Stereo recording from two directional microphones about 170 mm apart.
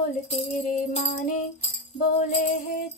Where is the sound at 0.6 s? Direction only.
45° left (ahead or behind).